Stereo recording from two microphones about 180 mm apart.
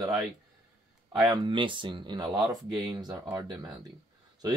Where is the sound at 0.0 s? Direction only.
20° right (ahead or behind).